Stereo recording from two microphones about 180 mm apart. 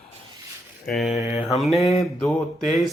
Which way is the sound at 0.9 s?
Centre (ahead or behind).